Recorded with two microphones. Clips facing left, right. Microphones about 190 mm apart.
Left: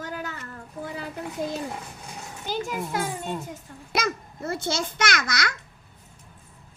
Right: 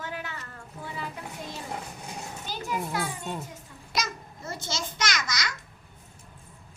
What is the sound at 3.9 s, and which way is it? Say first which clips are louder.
Babbling: left 5 dB; 60° left (ahead or behind).